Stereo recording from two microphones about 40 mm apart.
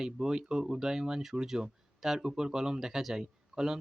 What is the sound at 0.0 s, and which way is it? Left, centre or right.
Speech, centre.